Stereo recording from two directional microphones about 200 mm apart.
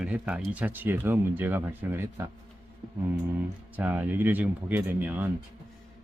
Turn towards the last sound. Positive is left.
turn(degrees=-10)  # may be behind; listen again after turning